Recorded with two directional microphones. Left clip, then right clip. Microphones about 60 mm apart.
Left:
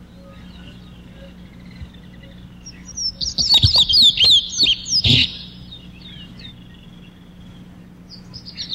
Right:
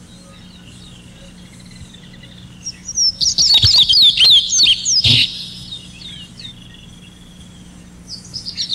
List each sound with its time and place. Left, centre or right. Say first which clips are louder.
2.6 s bird flight: right 9 dB; right
8.1 s chirp: right 10 dB; right